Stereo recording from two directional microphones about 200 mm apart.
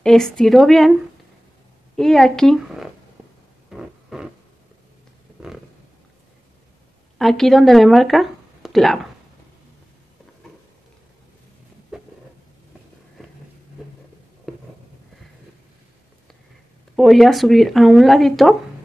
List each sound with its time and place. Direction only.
0.0 s speech: centre (ahead or behind)
2.0 s speech: centre (ahead or behind)
3.7 s a sound: centre (ahead or behind)
7.2 s speech: centre (ahead or behind)
11.9 s a sound: centre (ahead or behind)
14.5 s writing: centre (ahead or behind)
16.9 s speech: centre (ahead or behind)